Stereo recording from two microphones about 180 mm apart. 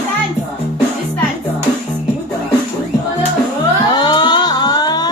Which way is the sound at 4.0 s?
25° left (ahead or behind).